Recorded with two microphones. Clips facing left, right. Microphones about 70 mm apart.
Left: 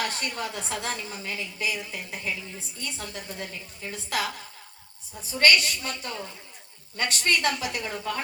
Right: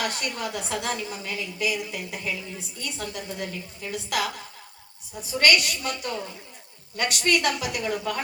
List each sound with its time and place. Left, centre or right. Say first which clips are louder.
0.0 s a woman's voice: right 1 dB; left
5.4 s a woman's voice: even; left